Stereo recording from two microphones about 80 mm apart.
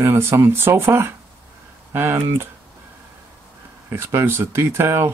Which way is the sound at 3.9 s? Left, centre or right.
Right.